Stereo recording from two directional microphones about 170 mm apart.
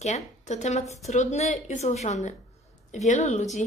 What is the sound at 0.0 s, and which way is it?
A woman's voice, 40° left (ahead or behind).